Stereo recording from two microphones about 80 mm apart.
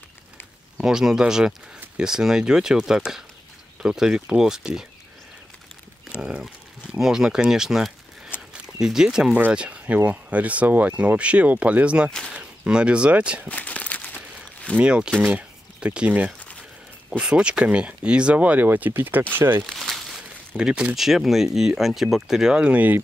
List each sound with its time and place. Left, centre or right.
0.7 s speech: centre
6.2 s speech: centre
8.4 s a sound: centre
9.5 s speech: centre
13.5 s crumpling: centre
14.8 s speech: centre
19.6 s crumpling: centre
20.5 s speech: centre